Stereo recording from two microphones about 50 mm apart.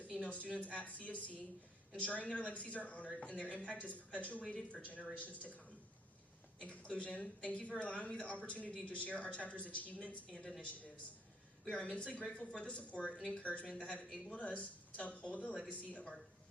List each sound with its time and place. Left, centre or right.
0.1 s speech: left
3.1 s speech: centre
11.8 s a woman's voice: centre
13.1 s a woman's voice: centre
13.4 s speech: left